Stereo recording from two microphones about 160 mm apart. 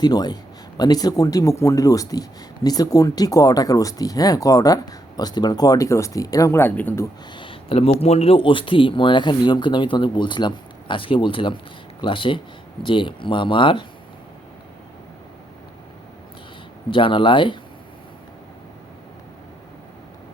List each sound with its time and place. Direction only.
0.0 s speech: 25° left (ahead or behind)
7.3 s speech: 35° left (ahead or behind)
16.9 s speech: 30° left (ahead or behind)